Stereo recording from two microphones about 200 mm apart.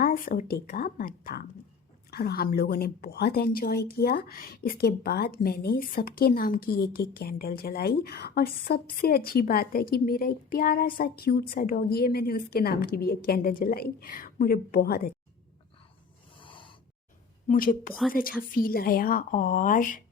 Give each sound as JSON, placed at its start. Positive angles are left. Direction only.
{"t": 0.0, "sound": "a woman's voice", "side_deg": 45}
{"t": 16.4, "sound": "snort", "side_deg": 25}
{"t": 17.5, "sound": "a woman's voice", "side_deg": 45}